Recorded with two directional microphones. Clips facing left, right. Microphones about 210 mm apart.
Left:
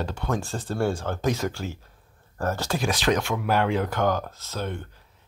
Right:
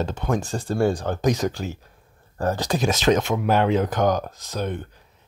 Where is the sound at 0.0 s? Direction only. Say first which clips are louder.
Right 4 dB; 20° right (ahead or behind).